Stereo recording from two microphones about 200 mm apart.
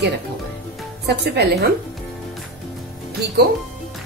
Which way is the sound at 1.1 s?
55° right (ahead or behind).